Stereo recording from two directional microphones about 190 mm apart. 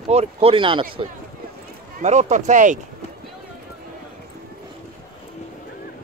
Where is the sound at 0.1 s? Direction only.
30° right (ahead or behind).